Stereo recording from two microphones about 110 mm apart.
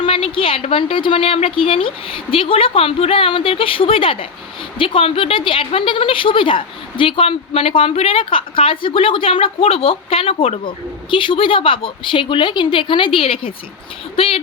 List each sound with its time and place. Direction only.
0.0 s a woman's voice: 55° left (ahead or behind)